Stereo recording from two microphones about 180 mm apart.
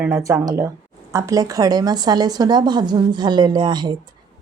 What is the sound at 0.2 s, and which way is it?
Speech, 20° right (ahead or behind).